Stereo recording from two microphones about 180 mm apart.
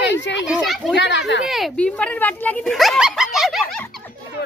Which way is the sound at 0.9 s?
75° left (ahead or behind).